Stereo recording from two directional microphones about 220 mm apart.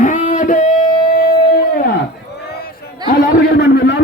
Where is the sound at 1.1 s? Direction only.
45° left (ahead or behind).